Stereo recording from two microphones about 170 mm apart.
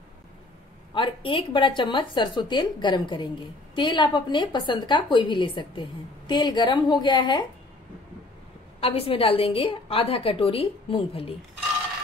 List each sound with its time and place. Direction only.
0.9 s a woman's voice: 30° left (ahead or behind)
8.8 s a woman's voice: 35° left (ahead or behind)